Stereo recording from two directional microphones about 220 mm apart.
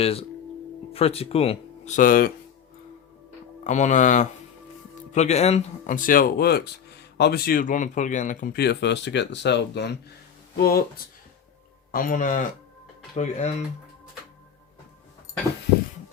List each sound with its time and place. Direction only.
0.0 s speech: 25° left (ahead or behind)
3.6 s speech: 35° left (ahead or behind)